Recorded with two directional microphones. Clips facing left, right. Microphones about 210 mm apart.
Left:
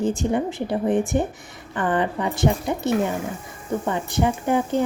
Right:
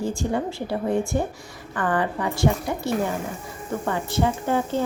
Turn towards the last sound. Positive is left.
turn(degrees=15)  # may be behind; listen again after turning